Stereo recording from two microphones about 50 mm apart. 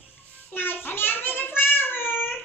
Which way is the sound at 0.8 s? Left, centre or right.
Left.